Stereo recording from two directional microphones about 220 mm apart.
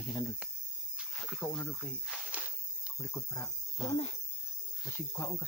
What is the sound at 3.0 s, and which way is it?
Speech, 10° left (ahead or behind).